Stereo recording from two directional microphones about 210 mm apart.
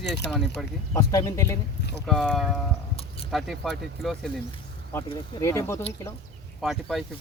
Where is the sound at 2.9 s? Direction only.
25° left (ahead or behind).